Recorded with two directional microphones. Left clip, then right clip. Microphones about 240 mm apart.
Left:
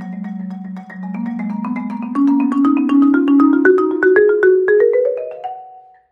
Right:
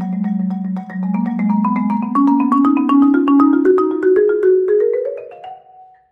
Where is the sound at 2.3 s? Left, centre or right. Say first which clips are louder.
Right 1 dB; centre.